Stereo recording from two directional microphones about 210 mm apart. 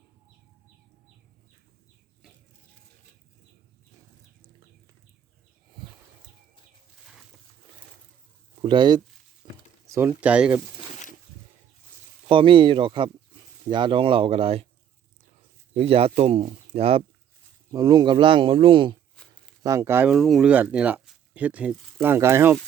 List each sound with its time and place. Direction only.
5.8 s a sound: 25° right (ahead or behind)
8.6 s speech: 20° right (ahead or behind)
9.4 s a sound: 20° right (ahead or behind)
9.8 s speech: 10° right (ahead or behind)
12.3 s speech: 25° right (ahead or behind)
15.7 s speech: 30° right (ahead or behind)
17.7 s speech: 20° right (ahead or behind)
19.1 s a sound: 5° left (ahead or behind)
19.6 s speech: 15° right (ahead or behind)